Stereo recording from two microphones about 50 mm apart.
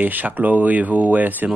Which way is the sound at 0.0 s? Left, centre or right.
Right.